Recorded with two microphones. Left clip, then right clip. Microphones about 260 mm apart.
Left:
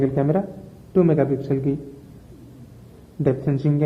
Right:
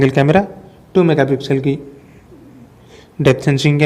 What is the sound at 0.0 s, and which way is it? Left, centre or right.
Speech, right.